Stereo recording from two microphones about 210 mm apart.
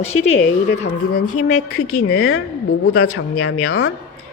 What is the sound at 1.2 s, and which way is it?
A woman's voice, 90° left.